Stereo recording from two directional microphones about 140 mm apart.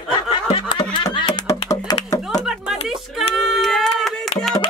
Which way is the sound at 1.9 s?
20° left (ahead or behind).